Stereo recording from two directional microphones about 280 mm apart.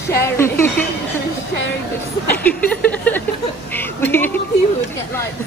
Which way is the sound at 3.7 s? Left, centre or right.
Centre.